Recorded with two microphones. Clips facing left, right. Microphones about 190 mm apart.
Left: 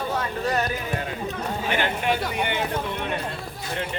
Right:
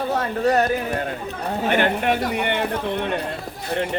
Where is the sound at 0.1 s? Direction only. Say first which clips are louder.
Right 8 dB; 55° right (ahead or behind).